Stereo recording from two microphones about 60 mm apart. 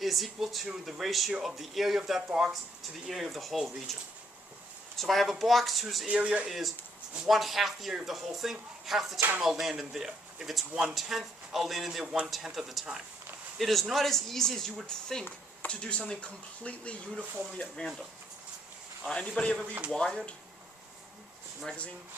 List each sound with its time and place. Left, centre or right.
0.0 s speech: centre
4.9 s speech: centre
6.1 s speech: right
6.5 s speech: centre
15.6 s speech: centre
17.6 s speech: centre
19.0 s speech: centre